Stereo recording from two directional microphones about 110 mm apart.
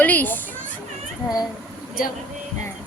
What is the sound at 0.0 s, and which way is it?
Speech, 15° left (ahead or behind).